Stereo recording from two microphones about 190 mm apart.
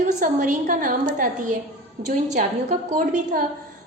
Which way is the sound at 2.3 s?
40° right (ahead or behind).